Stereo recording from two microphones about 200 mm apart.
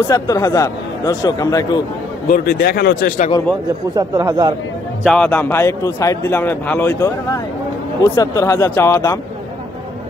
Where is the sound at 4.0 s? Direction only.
15° right (ahead or behind).